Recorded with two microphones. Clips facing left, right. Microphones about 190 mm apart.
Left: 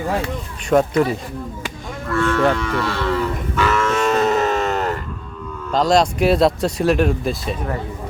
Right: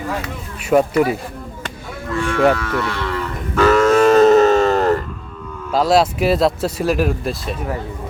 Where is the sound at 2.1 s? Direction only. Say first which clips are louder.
Right 1 dB; 15° right (ahead or behind).